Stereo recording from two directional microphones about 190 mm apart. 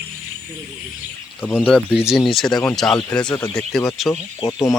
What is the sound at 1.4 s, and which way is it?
Speech, 5° left (ahead or behind).